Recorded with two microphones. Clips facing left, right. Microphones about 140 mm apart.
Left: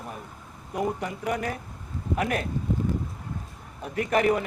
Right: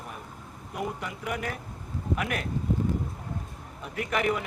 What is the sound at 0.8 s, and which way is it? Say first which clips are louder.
A man's voice: left 5 dB; 35° left (ahead or behind).